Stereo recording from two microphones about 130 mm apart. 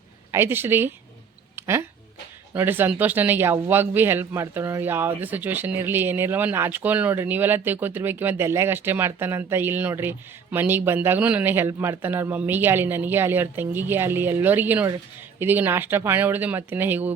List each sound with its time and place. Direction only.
0.3 s speech: 20° right (ahead or behind)
1.5 s a sound: 20° right (ahead or behind)
2.6 s speech: 15° right (ahead or behind)